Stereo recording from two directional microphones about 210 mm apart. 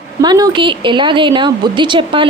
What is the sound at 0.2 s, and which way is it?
Speech, 20° right (ahead or behind).